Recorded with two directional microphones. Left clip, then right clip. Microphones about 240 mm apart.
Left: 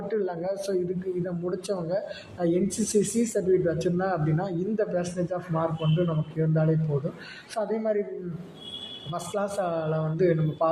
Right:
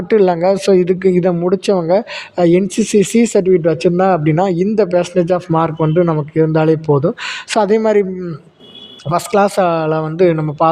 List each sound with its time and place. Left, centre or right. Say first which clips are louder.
0.1 s speech: right 18 dB; right
9.1 s speech: right 17 dB; right